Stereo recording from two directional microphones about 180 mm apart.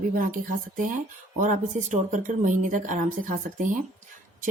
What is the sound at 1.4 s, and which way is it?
A woman's voice, 45° right (ahead or behind).